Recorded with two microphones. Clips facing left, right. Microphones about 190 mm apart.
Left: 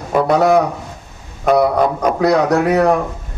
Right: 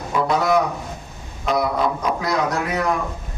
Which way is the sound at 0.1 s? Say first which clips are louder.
Left 6 dB; 60° left (ahead or behind).